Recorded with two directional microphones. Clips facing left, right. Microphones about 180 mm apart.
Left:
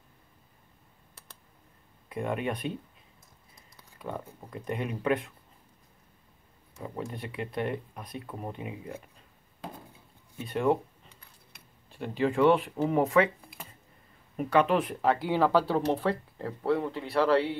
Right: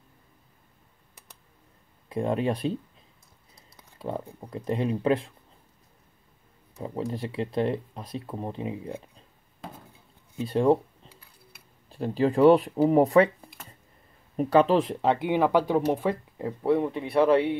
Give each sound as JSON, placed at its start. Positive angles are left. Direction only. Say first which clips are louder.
{"t": 2.0, "sound": "speech", "louder": "right 5 dB", "side_deg": -30}
{"t": 4.0, "sound": "speech", "louder": "right 5 dB", "side_deg": -30}
{"t": 6.8, "sound": "speech", "louder": "right 6 dB", "side_deg": -30}
{"t": 10.4, "sound": "speech", "louder": "right 5 dB", "side_deg": -30}
{"t": 11.1, "sound": "cutlery", "louder": "right 4 dB", "side_deg": -5}
{"t": 11.9, "sound": "speech", "louder": "right 4 dB", "side_deg": -35}
{"t": 14.3, "sound": "speech", "louder": "right 4 dB", "side_deg": -35}